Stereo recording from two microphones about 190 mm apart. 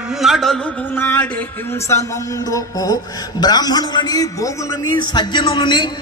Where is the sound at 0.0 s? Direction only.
Centre (ahead or behind).